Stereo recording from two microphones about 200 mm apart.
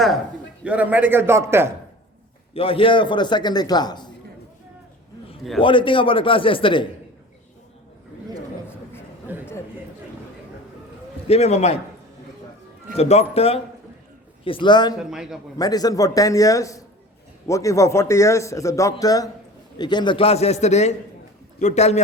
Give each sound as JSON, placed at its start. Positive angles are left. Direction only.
{"t": 0.6, "sound": "a man's voice", "side_deg": -5}
{"t": 2.5, "sound": "a man's voice", "side_deg": 25}
{"t": 5.5, "sound": "a man's voice", "side_deg": 25}
{"t": 9.3, "sound": "a sound", "side_deg": -10}
{"t": 11.3, "sound": "a man's voice", "side_deg": 30}
{"t": 13.0, "sound": "a man's voice", "side_deg": 30}
{"t": 15.1, "sound": "a man's voice", "side_deg": -5}
{"t": 15.5, "sound": "a man's voice", "side_deg": 20}